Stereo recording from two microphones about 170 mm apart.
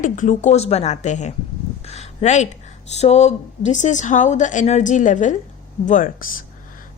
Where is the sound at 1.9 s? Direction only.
40° left (ahead or behind).